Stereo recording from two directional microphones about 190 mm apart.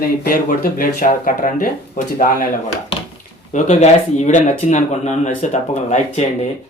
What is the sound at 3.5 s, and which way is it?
Speech, 40° left (ahead or behind).